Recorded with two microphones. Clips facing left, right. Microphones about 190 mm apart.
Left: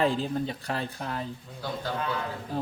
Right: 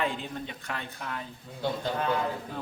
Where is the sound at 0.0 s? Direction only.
35° left (ahead or behind).